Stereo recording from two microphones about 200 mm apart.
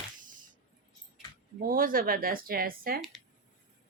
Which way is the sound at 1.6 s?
45° right (ahead or behind).